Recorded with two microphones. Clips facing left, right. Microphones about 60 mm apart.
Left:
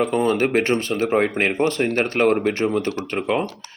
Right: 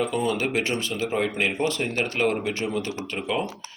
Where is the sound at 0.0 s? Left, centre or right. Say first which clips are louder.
Left 6 dB; left.